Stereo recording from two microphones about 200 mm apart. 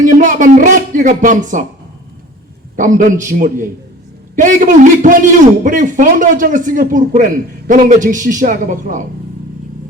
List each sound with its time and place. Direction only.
0.0 s a man's voice: 40° right (ahead or behind)
2.7 s a man's voice: 40° right (ahead or behind)